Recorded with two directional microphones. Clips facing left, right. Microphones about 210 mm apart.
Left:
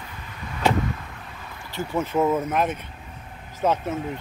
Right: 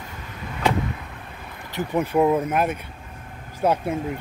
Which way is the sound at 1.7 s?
15° right (ahead or behind).